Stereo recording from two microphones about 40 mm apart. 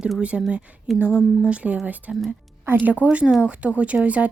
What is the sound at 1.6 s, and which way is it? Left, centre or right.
Speech, centre.